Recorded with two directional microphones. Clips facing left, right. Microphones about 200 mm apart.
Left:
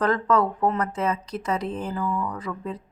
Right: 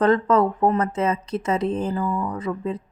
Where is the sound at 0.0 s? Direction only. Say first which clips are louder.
Right 4 dB; 25° right (ahead or behind).